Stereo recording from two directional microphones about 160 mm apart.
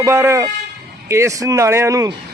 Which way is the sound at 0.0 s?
15° right (ahead or behind).